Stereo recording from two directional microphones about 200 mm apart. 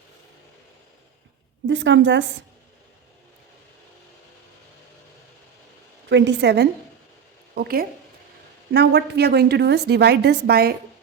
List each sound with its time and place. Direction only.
1.6 s a woman's voice: 70° right (ahead or behind)
6.1 s a woman's voice: 60° right (ahead or behind)